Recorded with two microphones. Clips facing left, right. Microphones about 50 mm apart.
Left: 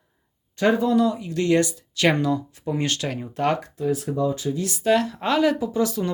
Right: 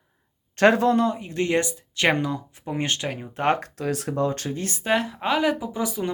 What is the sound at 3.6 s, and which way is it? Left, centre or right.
Speech, right.